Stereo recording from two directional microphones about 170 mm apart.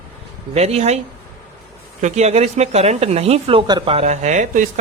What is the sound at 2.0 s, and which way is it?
Speech, 40° right (ahead or behind).